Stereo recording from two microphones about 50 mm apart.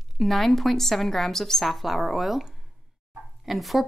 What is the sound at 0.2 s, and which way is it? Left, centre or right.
A woman's voice, centre.